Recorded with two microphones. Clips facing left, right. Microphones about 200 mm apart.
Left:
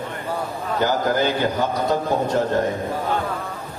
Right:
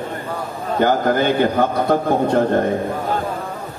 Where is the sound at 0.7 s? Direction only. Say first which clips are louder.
Right 4 dB; 55° right (ahead or behind).